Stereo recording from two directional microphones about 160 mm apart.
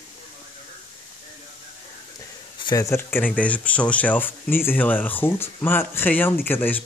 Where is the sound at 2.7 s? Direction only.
20° left (ahead or behind).